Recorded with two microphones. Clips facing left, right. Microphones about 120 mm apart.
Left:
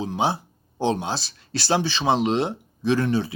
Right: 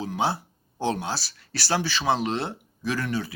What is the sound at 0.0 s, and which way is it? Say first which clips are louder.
Speech: left 2 dB; 20° left (ahead or behind).